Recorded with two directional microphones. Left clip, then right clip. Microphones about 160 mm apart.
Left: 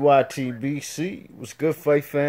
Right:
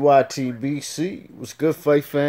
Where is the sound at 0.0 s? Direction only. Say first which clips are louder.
Right 2 dB; 15° right (ahead or behind).